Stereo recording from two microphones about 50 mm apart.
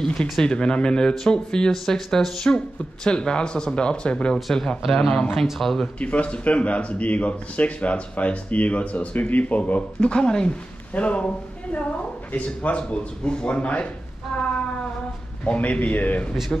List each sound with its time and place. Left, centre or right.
0.0 s speech: centre
4.8 s speech: centre
5.9 s speech: left
9.9 s speech: centre
15.4 s a man's voice: left